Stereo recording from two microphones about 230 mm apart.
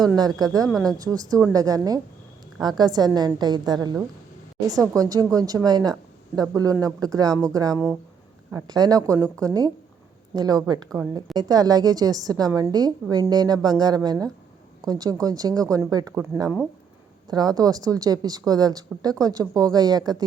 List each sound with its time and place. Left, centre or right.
0.0 s a woman's voice: centre